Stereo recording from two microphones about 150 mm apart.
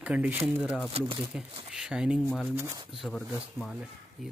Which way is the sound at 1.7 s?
5° right (ahead or behind).